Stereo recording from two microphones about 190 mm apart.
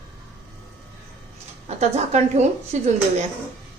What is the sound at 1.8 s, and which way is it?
A woman's voice, 35° right (ahead or behind).